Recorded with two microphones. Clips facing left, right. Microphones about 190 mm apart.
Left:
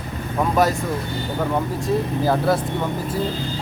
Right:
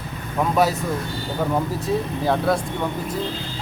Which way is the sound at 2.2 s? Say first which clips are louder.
Left 1 dB; centre (ahead or behind).